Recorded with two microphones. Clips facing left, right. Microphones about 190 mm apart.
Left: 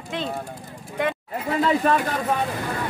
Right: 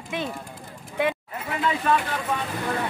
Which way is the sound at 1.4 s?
40° left (ahead or behind).